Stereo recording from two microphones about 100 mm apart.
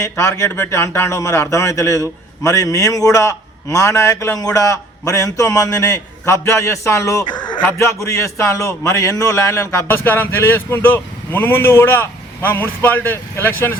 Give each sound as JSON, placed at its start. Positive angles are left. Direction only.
{"t": 0.0, "sound": "a man's voice", "side_deg": 35}